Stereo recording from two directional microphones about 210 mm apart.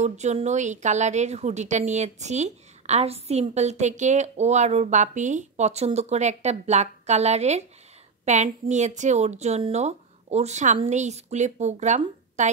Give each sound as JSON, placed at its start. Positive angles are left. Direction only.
{"t": 0.0, "sound": "a woman's voice", "side_deg": -30}